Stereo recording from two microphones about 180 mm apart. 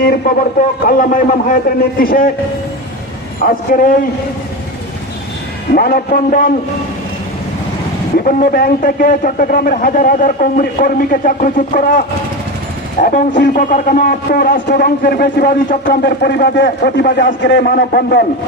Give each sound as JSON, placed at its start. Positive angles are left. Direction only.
{"t": 0.0, "sound": "a man's voice", "side_deg": 55}
{"t": 3.4, "sound": "a man's voice", "side_deg": 50}
{"t": 5.7, "sound": "a man's voice", "side_deg": 60}
{"t": 8.2, "sound": "a man's voice", "side_deg": 50}